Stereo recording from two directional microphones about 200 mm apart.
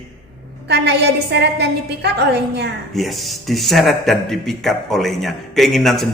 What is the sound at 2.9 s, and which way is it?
Speech, centre (ahead or behind).